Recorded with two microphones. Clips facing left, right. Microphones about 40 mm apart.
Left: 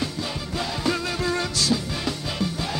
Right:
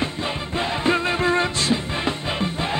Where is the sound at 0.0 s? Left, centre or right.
Right.